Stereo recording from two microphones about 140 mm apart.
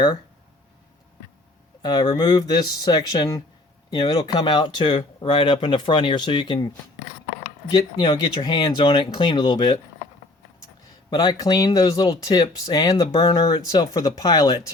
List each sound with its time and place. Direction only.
1.8 s speech: 30° left (ahead or behind)
7.7 s speech: 35° left (ahead or behind)
11.1 s speech: 30° left (ahead or behind)